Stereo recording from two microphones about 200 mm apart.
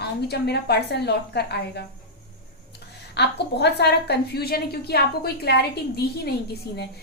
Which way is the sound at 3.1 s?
55° left (ahead or behind).